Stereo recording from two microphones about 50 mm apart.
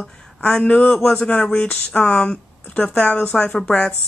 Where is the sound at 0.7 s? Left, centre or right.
Left.